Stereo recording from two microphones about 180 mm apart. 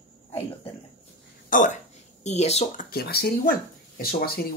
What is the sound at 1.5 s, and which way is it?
Speech, 45° left (ahead or behind).